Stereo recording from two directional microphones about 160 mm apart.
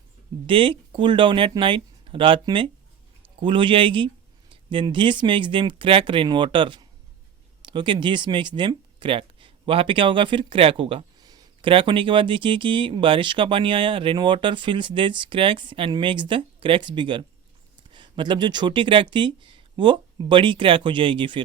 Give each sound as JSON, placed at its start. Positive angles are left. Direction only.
{"t": 0.4, "sound": "speech", "side_deg": -30}